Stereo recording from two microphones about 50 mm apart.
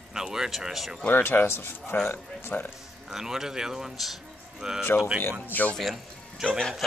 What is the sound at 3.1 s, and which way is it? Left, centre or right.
Speech, centre.